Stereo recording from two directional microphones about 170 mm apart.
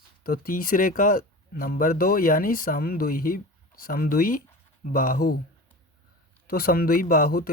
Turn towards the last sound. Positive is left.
turn(degrees=60)  # may be behind; listen again after turning